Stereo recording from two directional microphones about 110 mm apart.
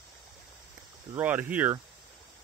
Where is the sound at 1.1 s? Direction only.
15° right (ahead or behind).